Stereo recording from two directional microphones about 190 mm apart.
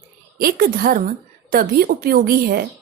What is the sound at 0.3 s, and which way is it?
A woman's voice, 50° right (ahead or behind).